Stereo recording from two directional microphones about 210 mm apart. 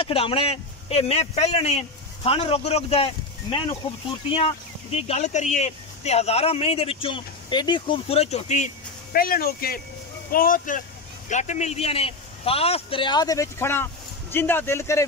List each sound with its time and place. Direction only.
0.0 s speech: 25° left (ahead or behind)
4.3 s speech: 25° left (ahead or behind)